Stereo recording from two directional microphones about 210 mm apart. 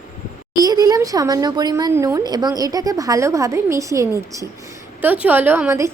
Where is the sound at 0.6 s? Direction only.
15° right (ahead or behind).